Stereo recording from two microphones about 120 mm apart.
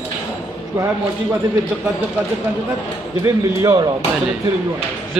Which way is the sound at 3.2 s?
35° right (ahead or behind).